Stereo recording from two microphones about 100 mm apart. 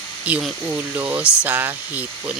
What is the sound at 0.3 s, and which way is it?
Speech, 15° right (ahead or behind).